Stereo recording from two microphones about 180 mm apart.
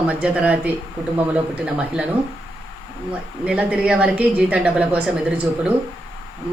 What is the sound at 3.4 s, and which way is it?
A woman's voice, 5° right (ahead or behind).